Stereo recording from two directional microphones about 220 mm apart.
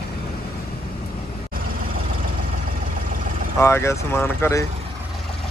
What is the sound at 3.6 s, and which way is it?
Speech, 10° left (ahead or behind).